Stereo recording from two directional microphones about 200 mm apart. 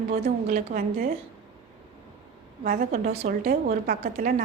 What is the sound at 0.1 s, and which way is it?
A woman's voice, 45° right (ahead or behind).